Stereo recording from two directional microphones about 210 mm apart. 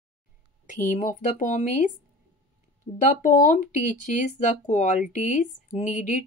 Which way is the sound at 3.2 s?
40° left (ahead or behind).